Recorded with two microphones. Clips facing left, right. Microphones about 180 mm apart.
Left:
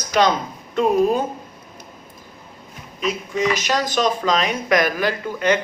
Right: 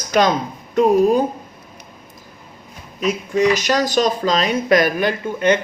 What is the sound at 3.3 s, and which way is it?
Speech, 45° right (ahead or behind).